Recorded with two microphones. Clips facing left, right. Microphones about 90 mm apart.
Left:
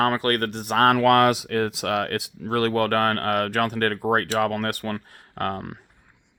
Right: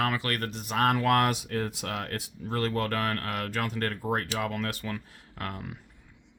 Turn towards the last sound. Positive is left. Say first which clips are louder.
# left 9 dB
turn(degrees=55)  # may be behind; listen again after turning